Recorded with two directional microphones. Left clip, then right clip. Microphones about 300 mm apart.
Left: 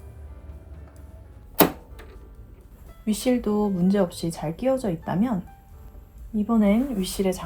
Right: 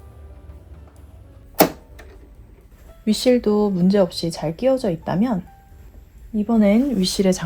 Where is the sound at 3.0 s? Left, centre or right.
Right.